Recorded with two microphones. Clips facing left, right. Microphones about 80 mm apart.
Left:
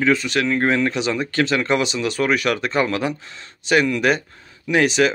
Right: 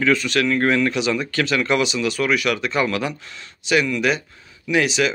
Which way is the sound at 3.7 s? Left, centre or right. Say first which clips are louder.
Left 2 dB; left.